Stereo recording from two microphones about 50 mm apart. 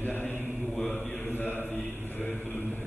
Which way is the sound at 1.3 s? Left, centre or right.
Left.